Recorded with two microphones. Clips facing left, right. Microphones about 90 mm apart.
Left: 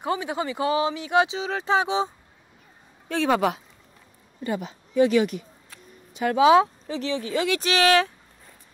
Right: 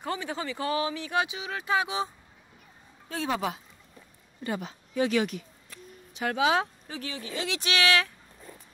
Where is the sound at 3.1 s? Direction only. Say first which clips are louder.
Left 8 dB; 80° left.